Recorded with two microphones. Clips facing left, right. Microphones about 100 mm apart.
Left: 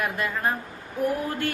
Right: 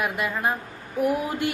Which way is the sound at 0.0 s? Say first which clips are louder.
Right 1 dB; 15° right (ahead or behind).